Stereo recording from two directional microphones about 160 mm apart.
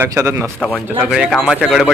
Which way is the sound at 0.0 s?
20° right (ahead or behind).